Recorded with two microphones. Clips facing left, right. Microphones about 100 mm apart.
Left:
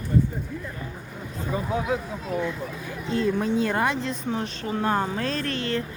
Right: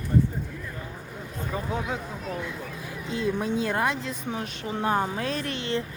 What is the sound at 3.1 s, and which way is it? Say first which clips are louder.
A woman's voice: left 3 dB; 10° right (ahead or behind).